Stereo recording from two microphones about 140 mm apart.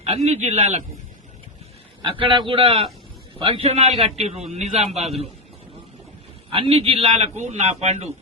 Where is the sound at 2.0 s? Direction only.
35° right (ahead or behind).